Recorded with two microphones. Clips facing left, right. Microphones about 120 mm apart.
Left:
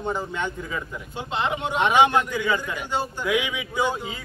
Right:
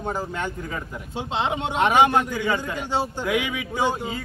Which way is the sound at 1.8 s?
45° right (ahead or behind).